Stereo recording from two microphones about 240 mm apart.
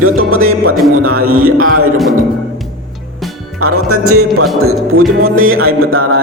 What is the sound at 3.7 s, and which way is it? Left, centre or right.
Speech, right.